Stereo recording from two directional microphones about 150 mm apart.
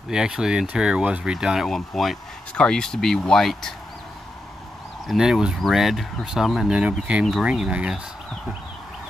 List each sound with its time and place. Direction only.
0.1 s speech: 5° right (ahead or behind)
5.0 s speech: 5° right (ahead or behind)